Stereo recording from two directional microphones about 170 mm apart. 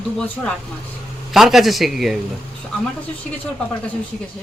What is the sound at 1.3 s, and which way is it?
Speech, centre (ahead or behind).